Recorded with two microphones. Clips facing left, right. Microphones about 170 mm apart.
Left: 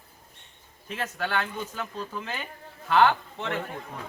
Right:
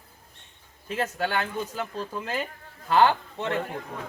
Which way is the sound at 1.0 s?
35° right (ahead or behind).